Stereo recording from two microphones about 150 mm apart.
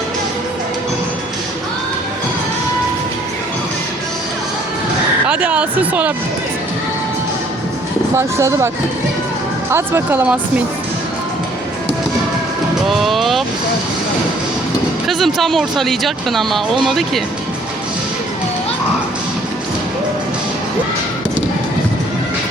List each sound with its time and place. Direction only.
5.2 s speech: 10° right (ahead or behind)
8.1 s speech: 20° right (ahead or behind)
9.7 s speech: 15° right (ahead or behind)
12.9 s vehicle: centre (ahead or behind)
15.0 s speech: centre (ahead or behind)